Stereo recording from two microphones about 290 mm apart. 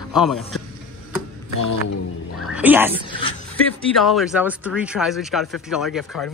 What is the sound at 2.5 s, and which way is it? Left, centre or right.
Speech, centre.